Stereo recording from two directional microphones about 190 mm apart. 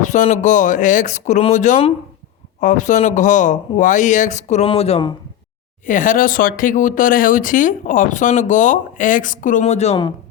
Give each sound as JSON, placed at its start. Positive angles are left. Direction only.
{"t": 0.0, "sound": "speech", "side_deg": 40}
{"t": 5.8, "sound": "speech", "side_deg": 45}